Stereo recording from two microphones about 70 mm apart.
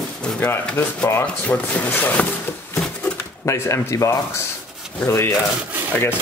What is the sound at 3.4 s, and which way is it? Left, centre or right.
Speech, left.